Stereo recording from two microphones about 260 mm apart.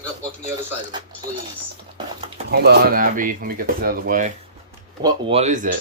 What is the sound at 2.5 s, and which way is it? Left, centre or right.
Speech, right.